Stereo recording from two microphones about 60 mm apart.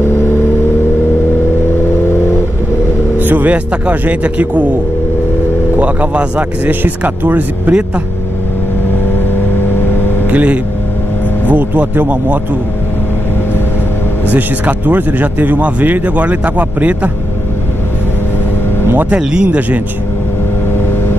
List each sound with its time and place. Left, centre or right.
3.2 s a man's voice: right
5.8 s speech: right
9.8 s vehicle: left
10.3 s speech: right
14.3 s speech: right
19.0 s speech: centre